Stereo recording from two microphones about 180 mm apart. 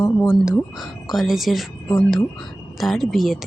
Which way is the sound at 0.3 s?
5° right (ahead or behind).